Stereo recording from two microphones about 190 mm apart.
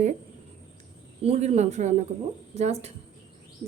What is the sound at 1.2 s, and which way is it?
A woman's voice, 35° right (ahead or behind).